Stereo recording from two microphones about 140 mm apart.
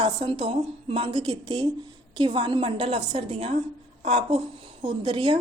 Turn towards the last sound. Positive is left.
turn(degrees=-35)  # may be behind; listen again after turning